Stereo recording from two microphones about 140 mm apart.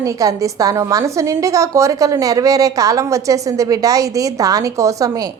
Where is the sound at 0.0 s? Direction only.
25° right (ahead or behind).